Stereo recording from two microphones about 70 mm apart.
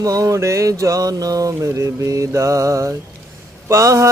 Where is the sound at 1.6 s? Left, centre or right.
Right.